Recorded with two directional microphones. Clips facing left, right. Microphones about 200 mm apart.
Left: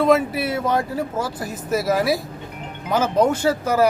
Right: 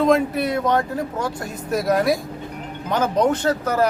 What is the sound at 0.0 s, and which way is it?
Speech, 5° left (ahead or behind).